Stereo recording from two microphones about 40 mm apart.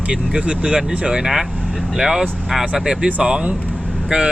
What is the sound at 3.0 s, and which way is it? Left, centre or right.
Speech, right.